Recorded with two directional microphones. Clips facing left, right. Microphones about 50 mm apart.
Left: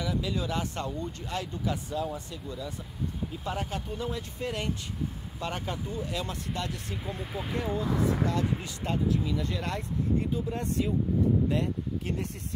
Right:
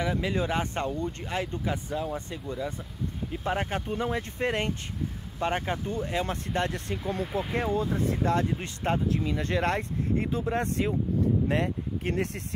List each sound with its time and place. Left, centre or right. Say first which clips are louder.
0.0 s speech: right 3 dB; right
10.3 s speech: right 3 dB; right
10.6 s speech: right 1 dB; right